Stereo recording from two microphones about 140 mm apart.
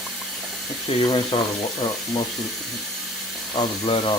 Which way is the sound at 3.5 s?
30° left (ahead or behind).